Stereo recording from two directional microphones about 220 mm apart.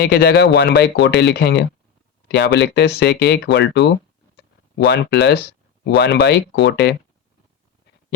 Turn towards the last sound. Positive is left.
turn(degrees=50)  # may be behind; listen again after turning